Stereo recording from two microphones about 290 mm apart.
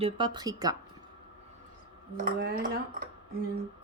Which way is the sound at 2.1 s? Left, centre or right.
Right.